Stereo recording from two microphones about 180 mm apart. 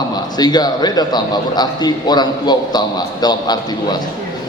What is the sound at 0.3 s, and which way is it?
A man's voice, 20° left (ahead or behind).